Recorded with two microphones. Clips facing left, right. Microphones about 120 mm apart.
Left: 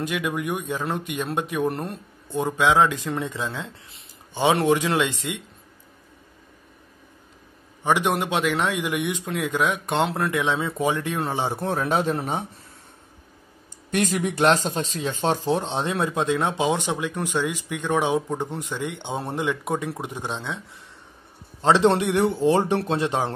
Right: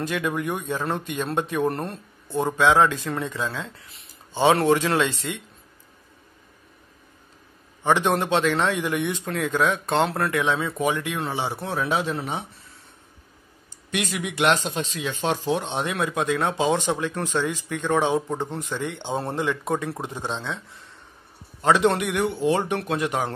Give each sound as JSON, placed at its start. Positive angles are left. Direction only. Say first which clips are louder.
{"t": 0.0, "sound": "speech", "louder": "even", "side_deg": 15}
{"t": 7.8, "sound": "speech", "louder": "right 1 dB", "side_deg": 10}
{"t": 10.8, "sound": "speech", "louder": "left 1 dB", "side_deg": 30}
{"t": 13.9, "sound": "speech", "louder": "left 4 dB", "side_deg": 40}
{"t": 21.5, "sound": "speech", "louder": "left 2 dB", "side_deg": 25}